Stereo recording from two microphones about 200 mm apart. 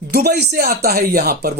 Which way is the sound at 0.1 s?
50° right (ahead or behind).